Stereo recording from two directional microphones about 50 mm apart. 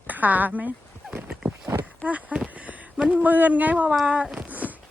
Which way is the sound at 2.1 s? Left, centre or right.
Right.